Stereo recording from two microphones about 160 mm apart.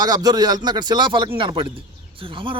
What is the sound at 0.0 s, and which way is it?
A man's voice, 25° right (ahead or behind).